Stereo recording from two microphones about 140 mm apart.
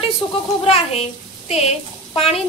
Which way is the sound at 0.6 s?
45° left (ahead or behind).